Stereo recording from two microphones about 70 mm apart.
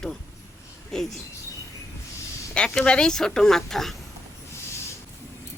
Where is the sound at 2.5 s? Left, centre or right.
Centre.